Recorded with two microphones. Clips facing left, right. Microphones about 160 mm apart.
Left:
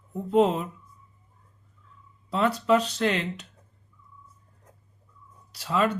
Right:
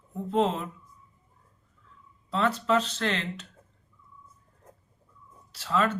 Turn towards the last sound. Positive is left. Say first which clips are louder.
# left 2 dB
turn(degrees=15)  # may be behind; listen again after turning